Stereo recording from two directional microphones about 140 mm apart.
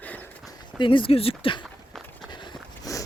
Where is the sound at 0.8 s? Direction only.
40° left (ahead or behind).